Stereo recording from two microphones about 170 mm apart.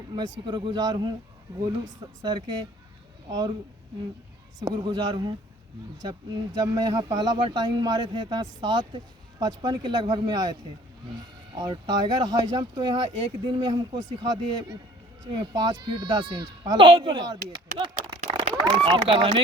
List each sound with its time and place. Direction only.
0.4 s speech: 25° right (ahead or behind)
4.6 s speech: 25° right (ahead or behind)